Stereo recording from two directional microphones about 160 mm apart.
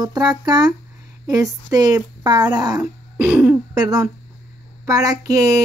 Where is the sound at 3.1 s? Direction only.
10° right (ahead or behind).